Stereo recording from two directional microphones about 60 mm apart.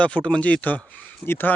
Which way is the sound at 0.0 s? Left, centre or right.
Left.